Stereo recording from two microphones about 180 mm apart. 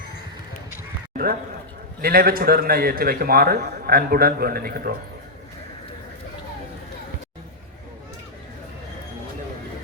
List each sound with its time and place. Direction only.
1.1 s a man's voice: 55° right (ahead or behind)